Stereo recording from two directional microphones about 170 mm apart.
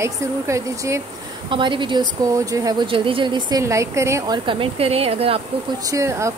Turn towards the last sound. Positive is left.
turn(degrees=-15)  # may be behind; listen again after turning